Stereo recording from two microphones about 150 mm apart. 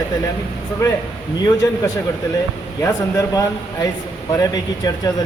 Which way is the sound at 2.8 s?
20° left (ahead or behind).